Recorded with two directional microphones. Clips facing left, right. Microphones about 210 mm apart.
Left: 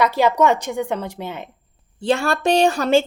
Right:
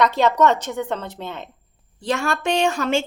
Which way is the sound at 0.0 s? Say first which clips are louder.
Left 1 dB; 10° left (ahead or behind).